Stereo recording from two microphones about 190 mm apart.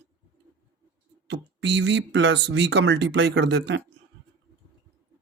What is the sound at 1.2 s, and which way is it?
Speech, 70° right (ahead or behind).